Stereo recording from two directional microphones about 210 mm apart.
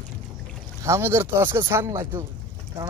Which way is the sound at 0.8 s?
10° right (ahead or behind).